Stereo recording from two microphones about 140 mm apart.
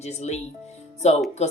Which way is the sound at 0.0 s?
50° left (ahead or behind).